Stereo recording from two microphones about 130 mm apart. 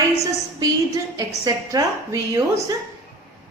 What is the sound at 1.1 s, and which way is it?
A woman's voice, 25° right (ahead or behind).